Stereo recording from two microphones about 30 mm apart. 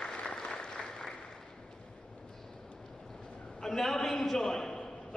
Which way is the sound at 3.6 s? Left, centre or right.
Centre.